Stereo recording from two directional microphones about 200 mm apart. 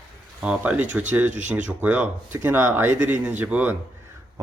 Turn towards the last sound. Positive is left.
turn(degrees=-5)  # may be behind; listen again after turning